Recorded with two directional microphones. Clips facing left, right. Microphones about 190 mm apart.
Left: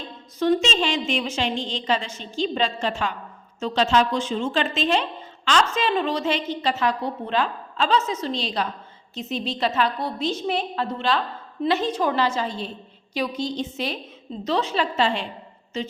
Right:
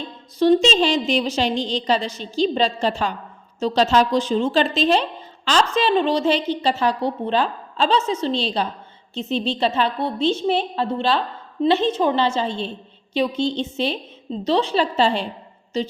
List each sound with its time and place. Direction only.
0.3 s a woman's voice: 30° right (ahead or behind)